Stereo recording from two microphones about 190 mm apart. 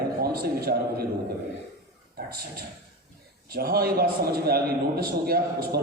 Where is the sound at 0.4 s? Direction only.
55° right (ahead or behind).